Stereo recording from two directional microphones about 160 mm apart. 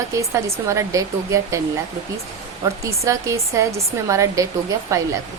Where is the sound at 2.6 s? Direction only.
20° right (ahead or behind).